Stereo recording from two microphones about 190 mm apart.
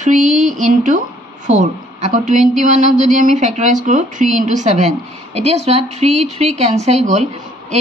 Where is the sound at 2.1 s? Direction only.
40° right (ahead or behind).